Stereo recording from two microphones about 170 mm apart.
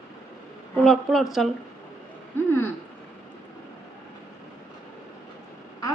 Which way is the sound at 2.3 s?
15° left (ahead or behind).